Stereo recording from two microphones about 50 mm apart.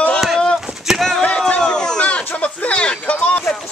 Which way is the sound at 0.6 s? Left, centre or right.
Centre.